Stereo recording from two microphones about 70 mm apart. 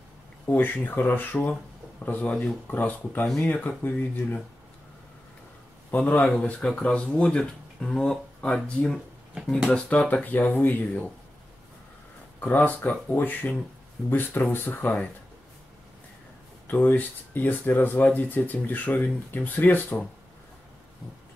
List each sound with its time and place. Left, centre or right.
0.5 s speech: left
5.9 s speech: left
6.6 s speech: centre
9.7 s speech: left
12.4 s speech: left
16.7 s speech: left